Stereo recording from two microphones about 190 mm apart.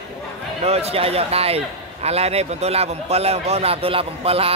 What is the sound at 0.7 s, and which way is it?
Speech, 30° right (ahead or behind).